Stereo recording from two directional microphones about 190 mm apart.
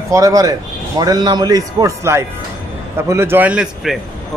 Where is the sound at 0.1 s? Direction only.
15° right (ahead or behind).